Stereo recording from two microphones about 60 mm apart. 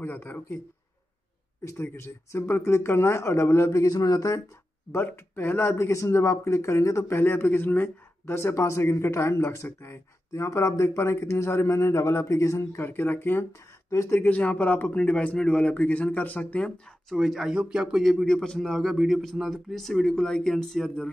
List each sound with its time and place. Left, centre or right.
0.0 s speech: left
1.6 s speech: left
4.9 s speech: left
7.1 s speech: left
12.7 s speech: left
14.2 s speech: left
17.1 s speech: centre
18.2 s a man's voice: centre